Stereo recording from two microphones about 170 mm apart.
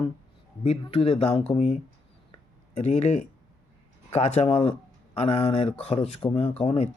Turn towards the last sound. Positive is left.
turn(degrees=35)  # may be behind; listen again after turning